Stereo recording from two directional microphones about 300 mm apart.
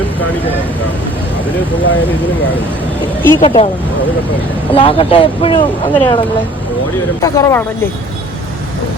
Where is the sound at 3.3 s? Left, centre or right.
Centre.